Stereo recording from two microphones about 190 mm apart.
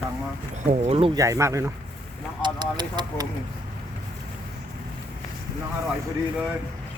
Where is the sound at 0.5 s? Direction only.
40° right (ahead or behind).